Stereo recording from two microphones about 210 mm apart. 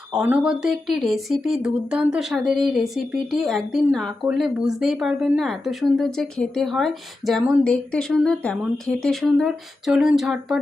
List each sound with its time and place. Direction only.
0.1 s speech: 5° right (ahead or behind)